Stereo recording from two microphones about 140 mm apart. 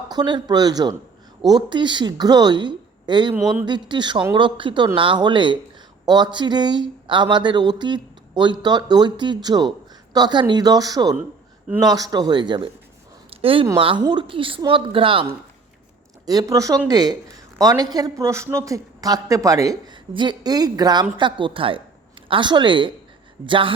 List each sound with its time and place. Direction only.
0.1 s speech: 30° right (ahead or behind)
3.4 s speech: 10° right (ahead or behind)
3.7 s speech: 35° right (ahead or behind)
16.2 s speech: 25° right (ahead or behind)